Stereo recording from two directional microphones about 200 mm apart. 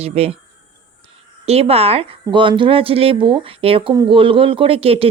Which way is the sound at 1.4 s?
30° right (ahead or behind).